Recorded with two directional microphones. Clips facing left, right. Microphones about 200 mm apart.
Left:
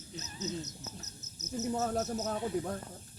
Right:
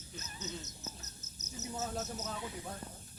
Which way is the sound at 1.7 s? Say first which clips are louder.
Left 5 dB; 55° left (ahead or behind).